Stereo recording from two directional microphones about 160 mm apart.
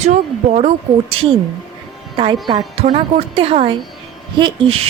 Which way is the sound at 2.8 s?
35° right (ahead or behind).